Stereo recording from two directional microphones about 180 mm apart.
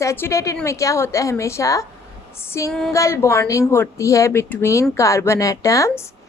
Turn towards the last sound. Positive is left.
turn(degrees=15)  # may be behind; listen again after turning